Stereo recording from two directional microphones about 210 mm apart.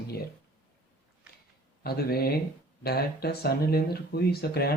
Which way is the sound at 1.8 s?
45° left (ahead or behind).